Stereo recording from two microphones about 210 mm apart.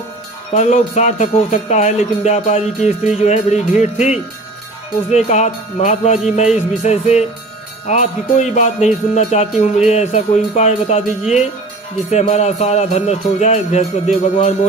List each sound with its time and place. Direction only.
0.5 s music: 35° left (ahead or behind)
12.1 s music: 30° left (ahead or behind)